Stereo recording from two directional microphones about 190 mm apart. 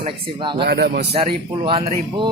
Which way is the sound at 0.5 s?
60° right (ahead or behind).